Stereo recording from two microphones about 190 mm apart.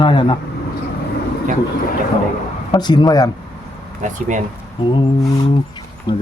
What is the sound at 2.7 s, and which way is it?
Speech, 20° left (ahead or behind).